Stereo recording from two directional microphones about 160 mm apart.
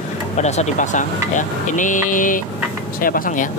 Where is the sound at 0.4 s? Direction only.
45° left (ahead or behind).